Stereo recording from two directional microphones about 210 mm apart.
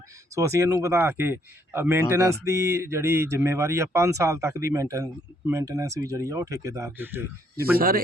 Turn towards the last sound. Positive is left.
turn(degrees=-45)  # may be behind; listen again after turning